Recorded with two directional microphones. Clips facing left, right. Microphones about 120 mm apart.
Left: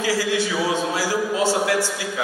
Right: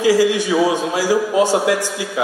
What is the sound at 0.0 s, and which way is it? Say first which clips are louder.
A man's voice: right 7 dB; 15° right (ahead or behind).